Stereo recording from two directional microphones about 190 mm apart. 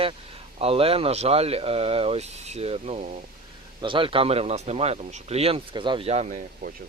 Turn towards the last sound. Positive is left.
turn(degrees=-35)  # may be behind; listen again after turning